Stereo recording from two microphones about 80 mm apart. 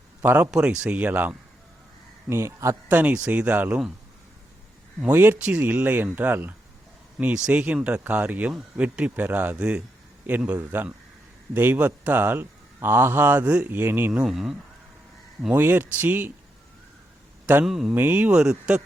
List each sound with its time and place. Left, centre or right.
0.2 s speech: right
0.5 s speech: centre
2.3 s speech: right
2.9 s speech: centre
5.0 s speech: right
7.3 s speech: centre; by 13.4 s right
13.4 s speech: centre
13.7 s speech: right
14.3 s speech: centre
15.5 s speech: right
17.4 s a sound: right
17.7 s speech: centre
17.9 s speech: right
18.3 s speech: centre